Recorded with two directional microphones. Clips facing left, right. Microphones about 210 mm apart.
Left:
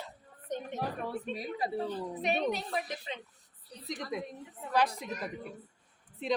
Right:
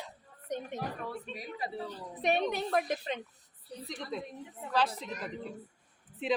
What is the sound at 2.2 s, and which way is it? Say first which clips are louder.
Speech: right 2 dB; 55° right (ahead or behind).